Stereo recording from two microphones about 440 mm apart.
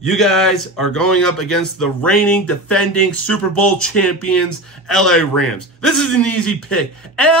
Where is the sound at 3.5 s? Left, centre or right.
Left.